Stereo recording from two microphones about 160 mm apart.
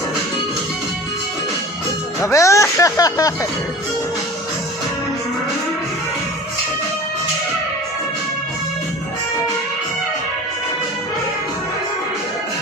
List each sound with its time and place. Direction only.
2.2 s speech: 20° left (ahead or behind)